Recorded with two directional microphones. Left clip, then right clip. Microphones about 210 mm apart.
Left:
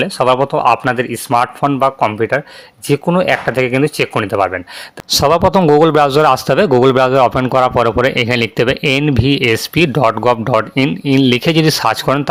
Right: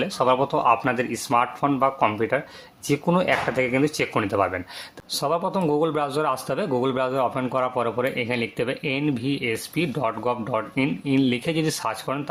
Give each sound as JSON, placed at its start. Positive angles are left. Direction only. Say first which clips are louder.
{"t": 0.0, "sound": "speech", "louder": "left 8 dB", "side_deg": 35}